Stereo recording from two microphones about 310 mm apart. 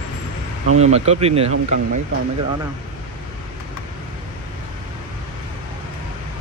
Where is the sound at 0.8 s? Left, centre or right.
Right.